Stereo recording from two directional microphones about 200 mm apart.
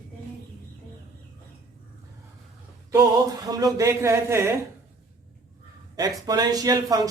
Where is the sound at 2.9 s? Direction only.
15° right (ahead or behind).